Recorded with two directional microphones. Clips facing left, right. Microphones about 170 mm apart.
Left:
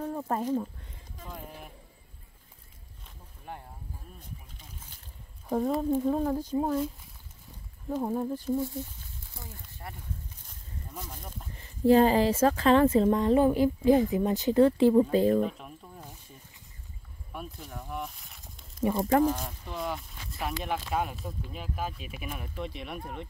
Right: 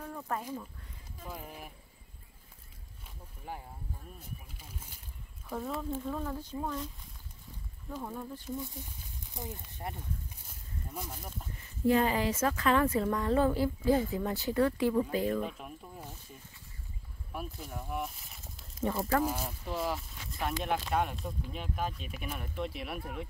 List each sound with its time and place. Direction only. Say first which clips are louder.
0.0 s a sound: left 6 dB; 30° left (ahead or behind)
3.5 s speech: even; 5° right (ahead or behind)
5.5 s speech: left 9 dB; 40° left (ahead or behind)
7.9 s speech: left 10 dB; 40° left (ahead or behind)
9.3 s speech: right 7 dB; 20° right (ahead or behind)
10.9 s speech: even; 10° right (ahead or behind)
11.5 s speech: left 6 dB; 30° left (ahead or behind)
15.4 s a sound: left 6 dB; 5° right (ahead or behind)
17.3 s a sound: even; 5° right (ahead or behind)
19.2 s speech: left 5 dB; 5° right (ahead or behind)